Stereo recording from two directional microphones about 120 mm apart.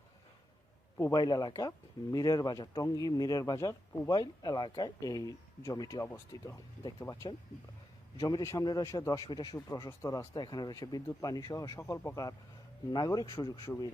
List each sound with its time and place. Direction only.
0.9 s speech: 30° left (ahead or behind)
6.1 s speech: 20° left (ahead or behind)